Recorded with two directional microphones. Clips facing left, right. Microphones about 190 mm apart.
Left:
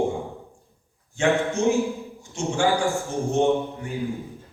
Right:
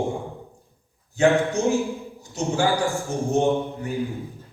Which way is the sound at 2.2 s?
35° right (ahead or behind).